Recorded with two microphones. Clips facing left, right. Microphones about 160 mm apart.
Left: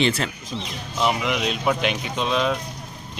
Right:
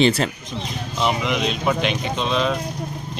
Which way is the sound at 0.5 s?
5° right (ahead or behind).